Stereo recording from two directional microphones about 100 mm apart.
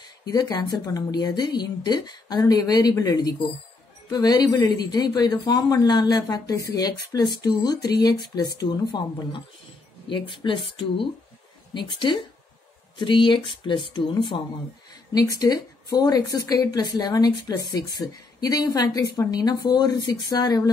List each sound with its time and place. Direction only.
0.2 s a woman's voice: 40° left (ahead or behind)
10.0 s speech: 55° left (ahead or behind)
15.1 s a woman's voice: 35° left (ahead or behind)